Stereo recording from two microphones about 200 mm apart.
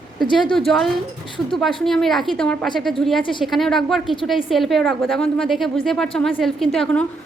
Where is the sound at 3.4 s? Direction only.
Centre (ahead or behind).